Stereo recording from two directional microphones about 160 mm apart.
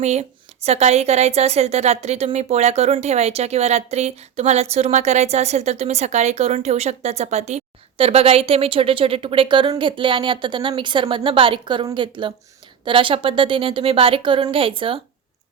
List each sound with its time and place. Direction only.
0.0 s a woman's voice: 45° right (ahead or behind)